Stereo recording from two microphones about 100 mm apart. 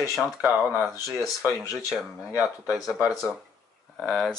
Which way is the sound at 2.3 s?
15° right (ahead or behind).